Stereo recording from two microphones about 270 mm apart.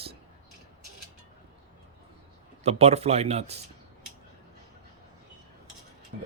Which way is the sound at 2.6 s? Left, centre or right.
Right.